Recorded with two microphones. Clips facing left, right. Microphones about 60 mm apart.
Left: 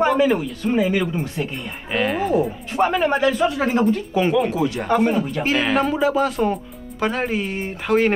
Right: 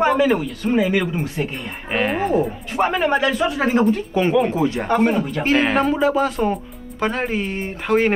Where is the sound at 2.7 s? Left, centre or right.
Right.